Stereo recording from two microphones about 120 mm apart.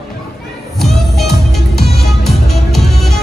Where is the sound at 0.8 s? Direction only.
Centre (ahead or behind).